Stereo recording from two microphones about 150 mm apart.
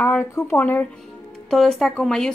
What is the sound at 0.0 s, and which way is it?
Speech, 15° left (ahead or behind).